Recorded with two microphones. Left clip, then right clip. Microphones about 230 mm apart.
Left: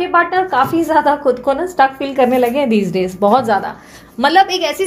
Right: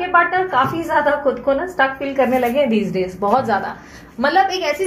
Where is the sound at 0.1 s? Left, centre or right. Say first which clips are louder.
Left 1 dB; left.